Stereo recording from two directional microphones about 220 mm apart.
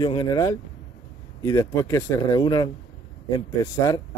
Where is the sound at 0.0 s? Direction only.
20° left (ahead or behind).